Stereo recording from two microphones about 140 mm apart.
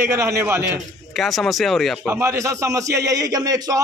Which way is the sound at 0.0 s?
20° right (ahead or behind).